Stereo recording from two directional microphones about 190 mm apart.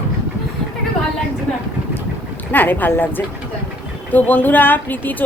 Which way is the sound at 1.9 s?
10° left (ahead or behind).